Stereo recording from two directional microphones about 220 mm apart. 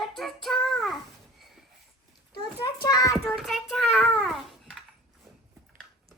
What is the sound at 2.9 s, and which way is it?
Child singing, 15° left (ahead or behind).